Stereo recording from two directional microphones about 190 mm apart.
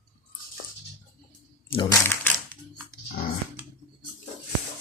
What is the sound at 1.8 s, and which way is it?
Crumpling, 15° left (ahead or behind).